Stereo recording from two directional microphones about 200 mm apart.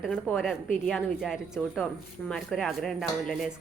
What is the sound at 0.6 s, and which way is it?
Speech, 40° left (ahead or behind).